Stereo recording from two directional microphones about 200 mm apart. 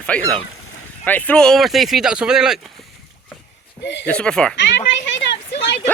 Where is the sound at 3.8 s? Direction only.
60° left (ahead or behind).